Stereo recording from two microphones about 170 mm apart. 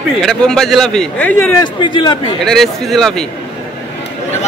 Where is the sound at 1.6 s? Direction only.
30° left (ahead or behind).